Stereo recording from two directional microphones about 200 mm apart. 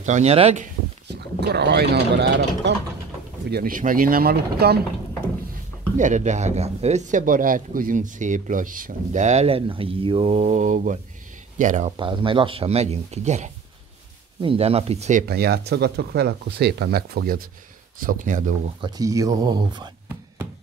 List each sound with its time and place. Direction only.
0.0 s speech: 35° right (ahead or behind)
1.0 s speech: 55° right (ahead or behind)
3.4 s speech: 50° right (ahead or behind)
5.9 s speech: 40° right (ahead or behind)
12.0 s speech: 25° right (ahead or behind)
15.2 s speech: 50° right (ahead or behind)
18.8 s speech: 20° right (ahead or behind)